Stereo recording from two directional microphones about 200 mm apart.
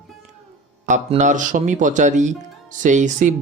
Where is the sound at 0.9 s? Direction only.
35° right (ahead or behind).